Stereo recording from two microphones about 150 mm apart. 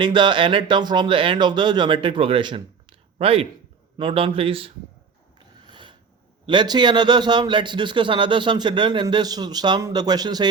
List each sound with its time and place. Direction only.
0.0 s a man's voice: 30° right (ahead or behind)
5.6 s mechanisms: 30° right (ahead or behind)
6.4 s a man's voice: 30° right (ahead or behind)